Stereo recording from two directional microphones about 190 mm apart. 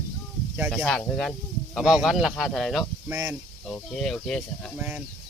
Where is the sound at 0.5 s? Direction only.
5° right (ahead or behind).